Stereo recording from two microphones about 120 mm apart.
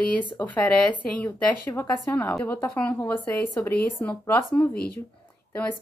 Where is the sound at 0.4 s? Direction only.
15° left (ahead or behind).